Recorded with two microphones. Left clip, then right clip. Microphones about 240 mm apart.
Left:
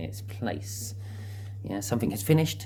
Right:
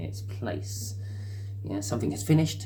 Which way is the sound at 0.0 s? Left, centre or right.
Left.